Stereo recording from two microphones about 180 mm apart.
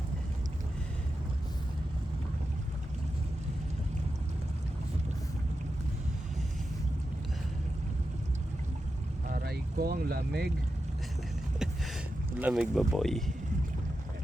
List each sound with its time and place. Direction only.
9.2 s boat: 55° right (ahead or behind)
12.4 s speech: 5° right (ahead or behind)